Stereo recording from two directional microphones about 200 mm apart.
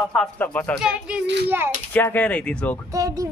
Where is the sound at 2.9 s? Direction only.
15° right (ahead or behind).